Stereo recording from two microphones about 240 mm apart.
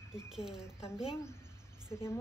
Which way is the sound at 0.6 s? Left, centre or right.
Centre.